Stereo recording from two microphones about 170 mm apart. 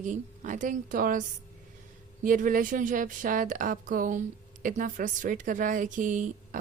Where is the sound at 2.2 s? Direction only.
50° right (ahead or behind).